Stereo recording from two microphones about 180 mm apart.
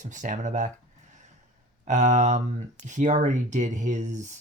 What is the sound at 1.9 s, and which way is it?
Speech, 45° right (ahead or behind).